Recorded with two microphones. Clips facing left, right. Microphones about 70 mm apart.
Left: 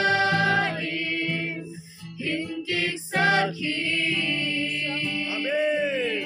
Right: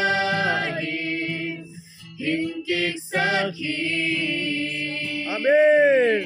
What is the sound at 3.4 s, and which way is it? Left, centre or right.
Choir, centre.